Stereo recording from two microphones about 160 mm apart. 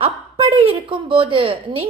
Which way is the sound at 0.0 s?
35° right (ahead or behind).